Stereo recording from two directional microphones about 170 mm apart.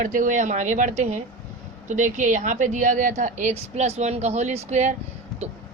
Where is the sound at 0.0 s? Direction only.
50° right (ahead or behind).